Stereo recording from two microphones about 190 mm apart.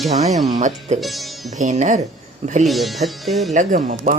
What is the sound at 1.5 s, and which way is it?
Music, 40° right (ahead or behind).